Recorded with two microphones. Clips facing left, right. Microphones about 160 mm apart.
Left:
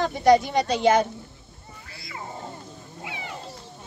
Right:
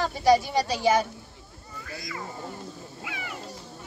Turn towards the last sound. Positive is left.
turn(degrees=25)  # may be behind; listen again after turning